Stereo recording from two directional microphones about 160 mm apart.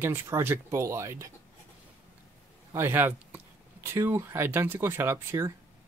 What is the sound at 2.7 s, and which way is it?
Speech, 15° right (ahead or behind).